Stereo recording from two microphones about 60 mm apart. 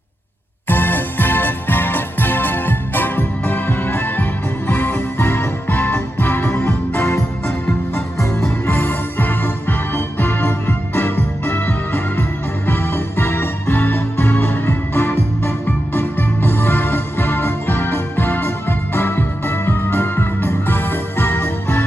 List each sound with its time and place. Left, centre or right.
0.7 s music: left
8.6 s music: left
12.6 s keyboard: left
18.9 s music: left